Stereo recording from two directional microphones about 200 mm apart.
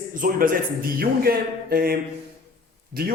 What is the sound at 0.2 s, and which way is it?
A man's voice, 45° right (ahead or behind).